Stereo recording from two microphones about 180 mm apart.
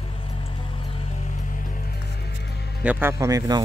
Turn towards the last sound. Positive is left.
turn(degrees=-20)  # may be behind; listen again after turning